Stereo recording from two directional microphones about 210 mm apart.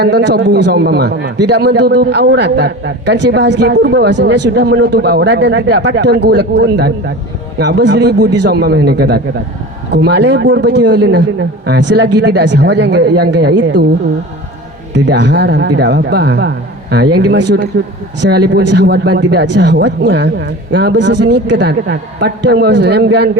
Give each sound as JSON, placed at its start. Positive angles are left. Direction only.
{"t": 0.0, "sound": "a man's voice", "side_deg": -55}
{"t": 14.9, "sound": "a man's voice", "side_deg": -55}